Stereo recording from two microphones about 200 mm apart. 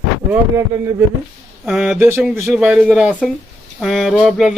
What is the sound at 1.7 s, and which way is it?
Speech, centre (ahead or behind).